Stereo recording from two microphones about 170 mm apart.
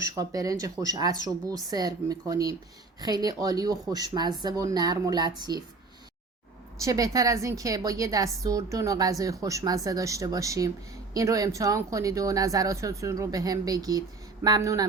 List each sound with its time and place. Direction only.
0.0 s a woman's voice: 20° right (ahead or behind)
6.7 s a woman's voice: 20° right (ahead or behind)